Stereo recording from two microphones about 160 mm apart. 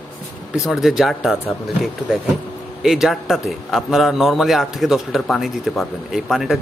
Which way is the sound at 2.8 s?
Centre (ahead or behind).